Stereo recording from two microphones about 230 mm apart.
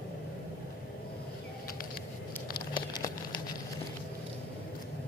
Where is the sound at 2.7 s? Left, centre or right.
Centre.